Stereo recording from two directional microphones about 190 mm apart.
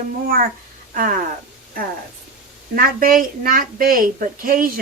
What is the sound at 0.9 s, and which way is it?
Speech, 45° right (ahead or behind).